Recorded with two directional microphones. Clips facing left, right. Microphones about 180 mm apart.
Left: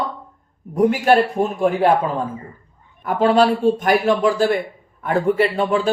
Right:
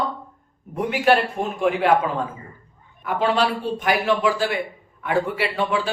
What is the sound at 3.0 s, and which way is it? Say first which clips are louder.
A man's voice: left 6 dB; 45° left (ahead or behind).